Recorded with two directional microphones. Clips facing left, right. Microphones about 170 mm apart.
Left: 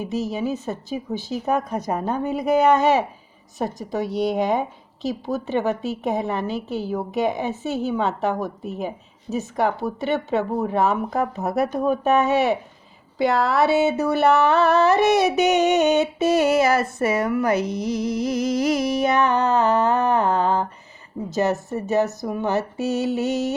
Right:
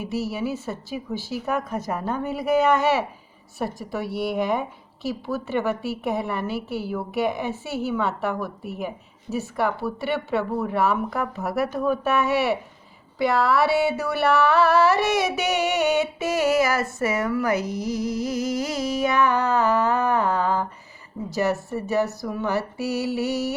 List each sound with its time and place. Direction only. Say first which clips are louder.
0.0 s a woman's voice: left 2 dB; 20° left (ahead or behind)
9.3 s speech: left 2 dB; 30° left (ahead or behind)
9.8 s a woman's voice: left 2 dB; 20° left (ahead or behind)